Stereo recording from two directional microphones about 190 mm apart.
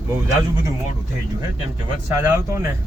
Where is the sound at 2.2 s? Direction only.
15° right (ahead or behind).